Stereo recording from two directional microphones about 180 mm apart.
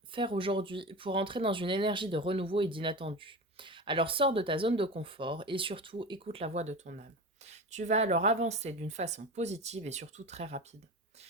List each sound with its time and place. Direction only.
0.1 s speech: 30° right (ahead or behind)